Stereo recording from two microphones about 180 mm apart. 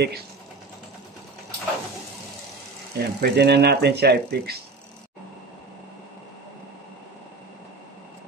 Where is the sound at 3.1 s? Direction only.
65° right (ahead or behind).